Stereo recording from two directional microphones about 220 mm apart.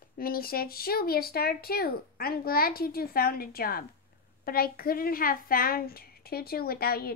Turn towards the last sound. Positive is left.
turn(degrees=45)  # may be behind; listen again after turning